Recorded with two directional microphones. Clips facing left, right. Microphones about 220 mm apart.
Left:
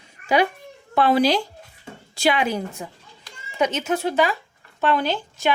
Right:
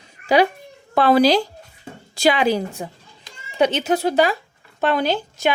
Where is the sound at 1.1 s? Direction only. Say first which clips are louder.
Right 5 dB; 35° right (ahead or behind).